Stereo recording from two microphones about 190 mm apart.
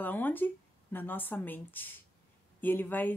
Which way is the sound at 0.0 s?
10° left (ahead or behind).